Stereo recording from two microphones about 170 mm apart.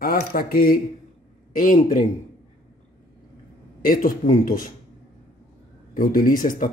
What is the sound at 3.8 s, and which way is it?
Speech, 55° left (ahead or behind).